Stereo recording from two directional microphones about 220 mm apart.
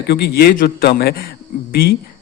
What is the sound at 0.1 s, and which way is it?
Speech, 45° left (ahead or behind).